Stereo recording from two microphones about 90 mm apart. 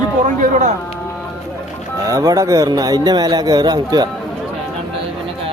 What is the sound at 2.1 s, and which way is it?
Speech, 40° right (ahead or behind).